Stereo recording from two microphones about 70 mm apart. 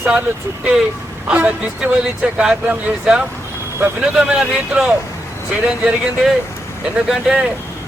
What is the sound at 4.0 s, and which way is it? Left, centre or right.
Speech, centre.